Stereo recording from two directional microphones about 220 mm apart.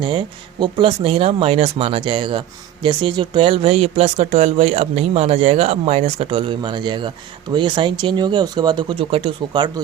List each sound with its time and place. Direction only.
0.0 s speech: 20° right (ahead or behind)